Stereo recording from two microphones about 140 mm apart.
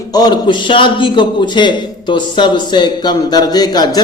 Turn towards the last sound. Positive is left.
turn(degrees=30)  # may be behind; listen again after turning